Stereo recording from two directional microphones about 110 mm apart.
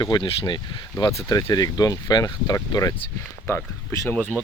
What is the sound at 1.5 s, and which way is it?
Speech, 35° left (ahead or behind).